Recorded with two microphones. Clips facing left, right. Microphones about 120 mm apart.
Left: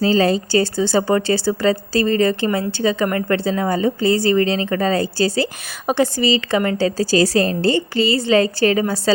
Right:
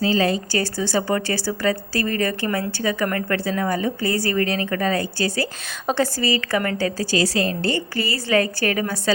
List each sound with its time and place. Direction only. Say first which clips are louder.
0.0 s speech: left 4 dB; 35° left (ahead or behind)
5.9 s speech: left 4 dB; 20° left (ahead or behind)